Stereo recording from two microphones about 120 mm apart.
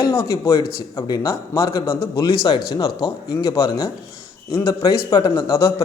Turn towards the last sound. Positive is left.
turn(degrees=25)  # may be behind; listen again after turning